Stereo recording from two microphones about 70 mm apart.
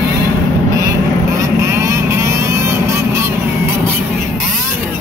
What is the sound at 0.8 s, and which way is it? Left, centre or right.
Vehicle, right.